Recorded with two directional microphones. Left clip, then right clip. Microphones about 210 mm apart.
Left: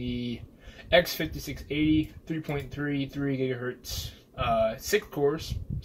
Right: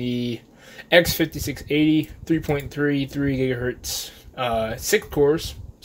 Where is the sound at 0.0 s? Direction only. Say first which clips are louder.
Right 8 dB; 45° right (ahead or behind).